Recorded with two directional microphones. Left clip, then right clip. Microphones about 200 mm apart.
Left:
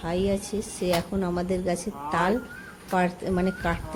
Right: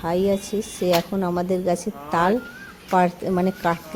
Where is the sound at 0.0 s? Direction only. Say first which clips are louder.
Right 5 dB; 35° right (ahead or behind).